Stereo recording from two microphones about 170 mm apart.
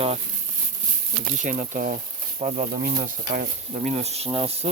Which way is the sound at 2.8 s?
55° right (ahead or behind).